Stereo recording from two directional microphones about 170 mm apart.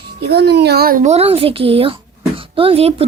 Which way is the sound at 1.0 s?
35° right (ahead or behind).